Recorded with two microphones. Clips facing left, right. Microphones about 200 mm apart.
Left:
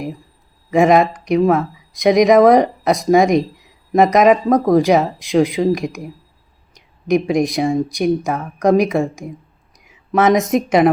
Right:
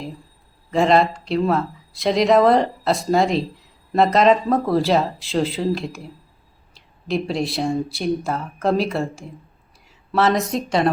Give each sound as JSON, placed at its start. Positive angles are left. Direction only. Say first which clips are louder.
{"t": 0.0, "sound": "speech", "louder": "left 6 dB", "side_deg": 15}